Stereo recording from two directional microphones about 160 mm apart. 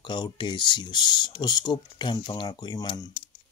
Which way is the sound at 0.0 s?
30° left (ahead or behind).